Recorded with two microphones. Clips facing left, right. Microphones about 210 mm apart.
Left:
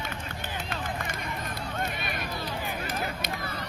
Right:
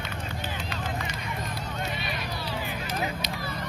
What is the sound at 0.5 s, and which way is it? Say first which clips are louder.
Run: even; 50° left (ahead or behind).